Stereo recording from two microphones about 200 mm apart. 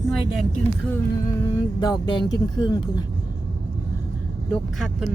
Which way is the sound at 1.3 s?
15° left (ahead or behind).